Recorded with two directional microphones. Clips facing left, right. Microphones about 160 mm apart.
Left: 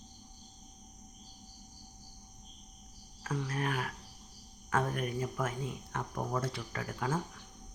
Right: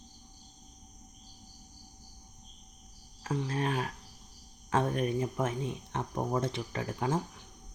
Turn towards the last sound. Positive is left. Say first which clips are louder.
# right 3 dB
turn(degrees=-25)  # may be behind; listen again after turning